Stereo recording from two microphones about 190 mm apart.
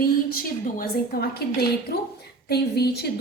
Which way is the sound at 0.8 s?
55° left (ahead or behind).